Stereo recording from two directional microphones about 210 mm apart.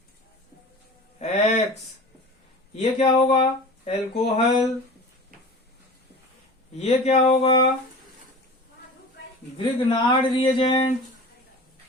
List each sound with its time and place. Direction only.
1.2 s a sound: 30° left (ahead or behind)
2.7 s speech: 30° left (ahead or behind)
6.7 s speech: 30° left (ahead or behind)
9.6 s speech: 25° left (ahead or behind)